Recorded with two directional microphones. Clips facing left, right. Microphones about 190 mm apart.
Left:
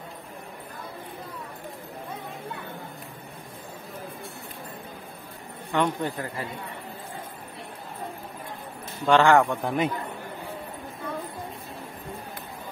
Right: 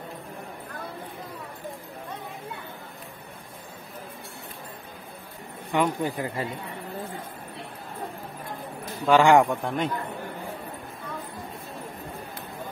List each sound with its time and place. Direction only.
5.7 s a man's voice: 15° right (ahead or behind)
9.0 s a man's voice: 10° right (ahead or behind)
9.6 s a man's voice: centre (ahead or behind)